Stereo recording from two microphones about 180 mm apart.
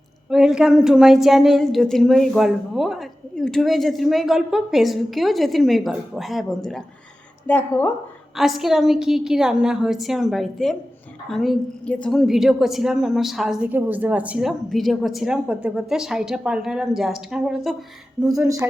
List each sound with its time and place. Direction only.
0.3 s a woman's voice: 5° right (ahead or behind)
18.3 s speech: 20° right (ahead or behind)